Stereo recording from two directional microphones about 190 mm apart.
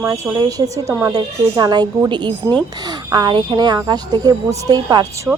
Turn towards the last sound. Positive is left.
turn(degrees=-20)  # may be behind; listen again after turning